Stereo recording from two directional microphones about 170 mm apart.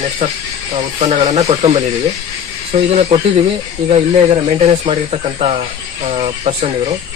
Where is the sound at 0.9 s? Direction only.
35° right (ahead or behind).